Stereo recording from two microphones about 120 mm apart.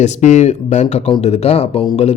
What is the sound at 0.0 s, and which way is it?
Speech, 75° left (ahead or behind).